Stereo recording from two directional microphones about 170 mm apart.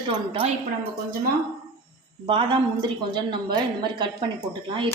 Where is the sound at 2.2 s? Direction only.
30° right (ahead or behind).